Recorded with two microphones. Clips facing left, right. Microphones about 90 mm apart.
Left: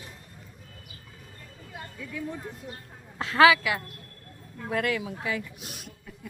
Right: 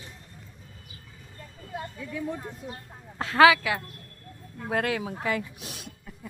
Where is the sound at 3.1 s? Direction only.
35° right (ahead or behind).